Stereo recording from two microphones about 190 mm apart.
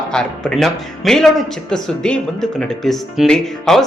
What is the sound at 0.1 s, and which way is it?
Speech, 5° left (ahead or behind).